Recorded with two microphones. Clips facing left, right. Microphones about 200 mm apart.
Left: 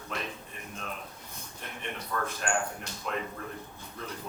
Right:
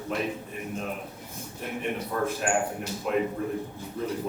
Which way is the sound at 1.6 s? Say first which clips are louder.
Right 9 dB; 10° right (ahead or behind).